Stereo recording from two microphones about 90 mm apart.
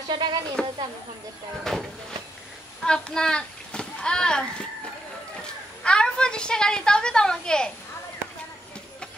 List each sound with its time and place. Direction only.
0.1 s speech: 55° right (ahead or behind)
0.6 s a woman's voice: 10° left (ahead or behind)
5.9 s a woman's voice: 10° left (ahead or behind)